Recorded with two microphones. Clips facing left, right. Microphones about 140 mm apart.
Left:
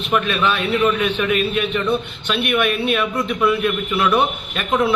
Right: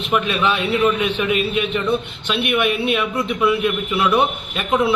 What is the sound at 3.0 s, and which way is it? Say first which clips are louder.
A man's voice: even; centre (ahead or behind).